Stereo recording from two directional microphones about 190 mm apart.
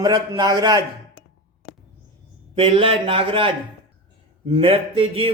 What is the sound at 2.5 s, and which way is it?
A man's voice, 30° right (ahead or behind).